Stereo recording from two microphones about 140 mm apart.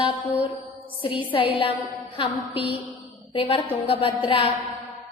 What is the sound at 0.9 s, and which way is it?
A woman's voice, 40° left (ahead or behind).